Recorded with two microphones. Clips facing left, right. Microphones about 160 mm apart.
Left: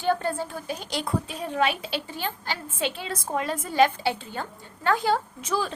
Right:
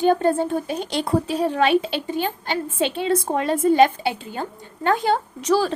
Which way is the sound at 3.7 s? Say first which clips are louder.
Right 4 dB; 20° right (ahead or behind).